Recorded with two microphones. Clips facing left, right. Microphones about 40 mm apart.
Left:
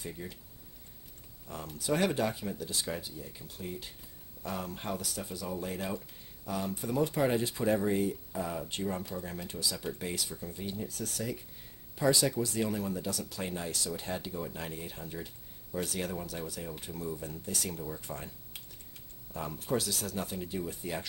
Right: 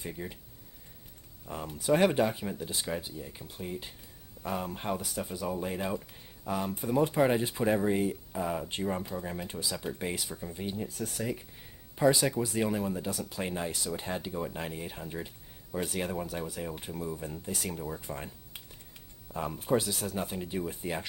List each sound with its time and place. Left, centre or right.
0.0 s speech: centre
1.5 s speech: centre